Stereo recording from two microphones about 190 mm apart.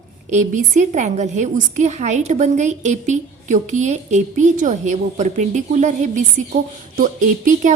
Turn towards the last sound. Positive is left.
turn(degrees=-45)  # may be behind; listen again after turning